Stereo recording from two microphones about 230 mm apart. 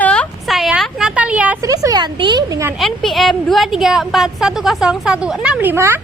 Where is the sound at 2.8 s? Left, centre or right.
Centre.